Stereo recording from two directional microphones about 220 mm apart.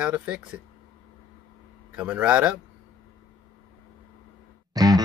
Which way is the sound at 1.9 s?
5° right (ahead or behind).